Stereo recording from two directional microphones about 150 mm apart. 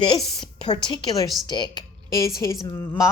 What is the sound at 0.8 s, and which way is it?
A woman's voice, 30° left (ahead or behind).